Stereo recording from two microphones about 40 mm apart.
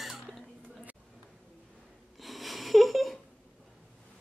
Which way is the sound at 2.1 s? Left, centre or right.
Centre.